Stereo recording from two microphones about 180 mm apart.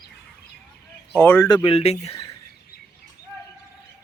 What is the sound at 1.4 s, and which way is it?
Speech, 25° left (ahead or behind).